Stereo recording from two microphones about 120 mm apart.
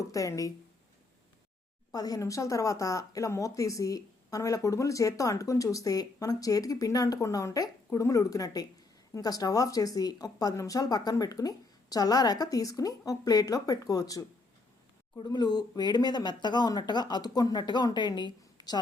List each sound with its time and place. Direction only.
0.0 s speech: 25° left (ahead or behind)
1.9 s speech: 30° left (ahead or behind)